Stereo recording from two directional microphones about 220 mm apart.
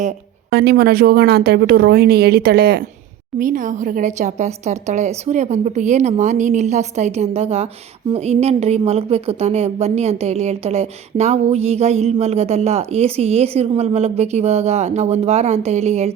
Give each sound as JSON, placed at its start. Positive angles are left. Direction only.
{"t": 0.5, "sound": "a woman's voice", "side_deg": -45}